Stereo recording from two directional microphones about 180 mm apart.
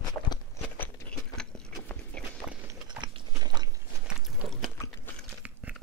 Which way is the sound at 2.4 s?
10° right (ahead or behind).